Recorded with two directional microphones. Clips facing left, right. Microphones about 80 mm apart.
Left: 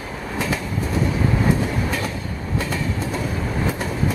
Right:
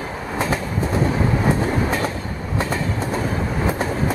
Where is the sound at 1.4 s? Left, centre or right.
Right.